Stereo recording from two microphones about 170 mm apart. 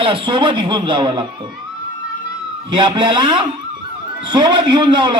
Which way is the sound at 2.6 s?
25° right (ahead or behind).